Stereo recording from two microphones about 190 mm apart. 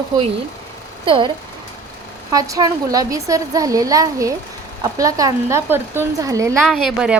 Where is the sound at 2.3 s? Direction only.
20° right (ahead or behind).